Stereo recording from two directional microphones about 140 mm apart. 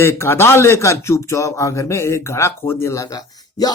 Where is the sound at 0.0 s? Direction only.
20° left (ahead or behind).